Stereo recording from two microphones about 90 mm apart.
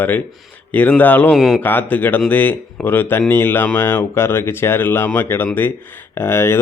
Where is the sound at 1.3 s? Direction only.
Centre (ahead or behind).